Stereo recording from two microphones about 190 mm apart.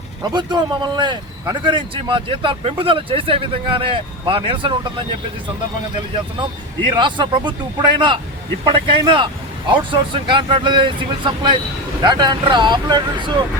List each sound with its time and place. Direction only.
0.2 s a man's voice: 25° right (ahead or behind)
6.9 s a man's voice: 25° right (ahead or behind)